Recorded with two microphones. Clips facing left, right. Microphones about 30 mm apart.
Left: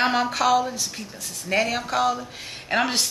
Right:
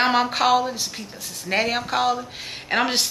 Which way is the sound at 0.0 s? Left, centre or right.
Centre.